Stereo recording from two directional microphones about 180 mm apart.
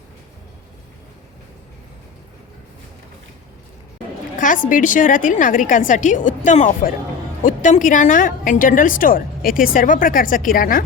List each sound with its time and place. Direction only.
4.4 s a woman's voice: 45° left (ahead or behind)